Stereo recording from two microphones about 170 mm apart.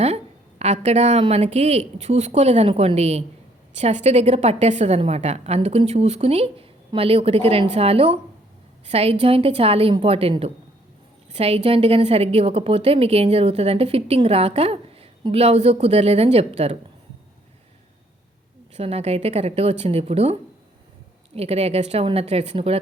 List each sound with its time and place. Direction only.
0.6 s a woman's voice: 40° right (ahead or behind)
18.7 s a woman's voice: 35° right (ahead or behind)
21.3 s a woman's voice: 40° right (ahead or behind)